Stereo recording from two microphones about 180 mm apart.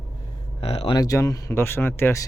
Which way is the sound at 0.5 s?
30° left (ahead or behind).